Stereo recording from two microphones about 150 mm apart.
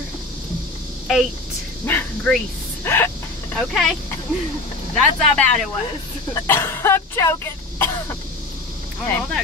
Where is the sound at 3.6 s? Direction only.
5° left (ahead or behind).